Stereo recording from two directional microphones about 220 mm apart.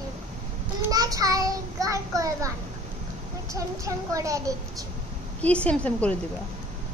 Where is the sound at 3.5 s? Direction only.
15° right (ahead or behind).